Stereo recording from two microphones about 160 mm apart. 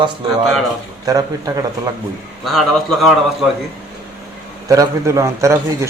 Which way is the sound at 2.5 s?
Centre (ahead or behind).